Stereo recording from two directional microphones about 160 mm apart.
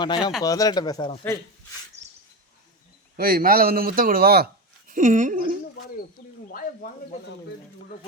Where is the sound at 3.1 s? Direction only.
65° right (ahead or behind).